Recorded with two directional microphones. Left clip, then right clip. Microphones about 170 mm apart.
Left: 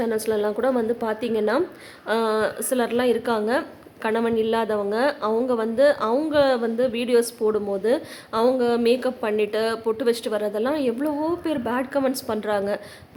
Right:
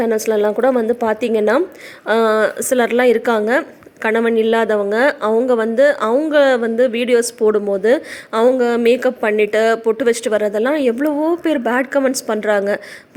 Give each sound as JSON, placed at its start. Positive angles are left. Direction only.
{"t": 0.0, "sound": "a woman's voice", "side_deg": -35}